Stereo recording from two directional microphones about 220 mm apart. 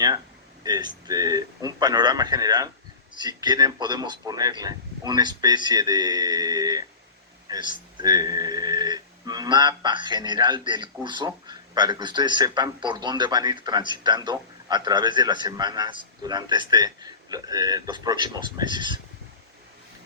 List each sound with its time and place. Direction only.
0.6 s a man's voice: 20° right (ahead or behind)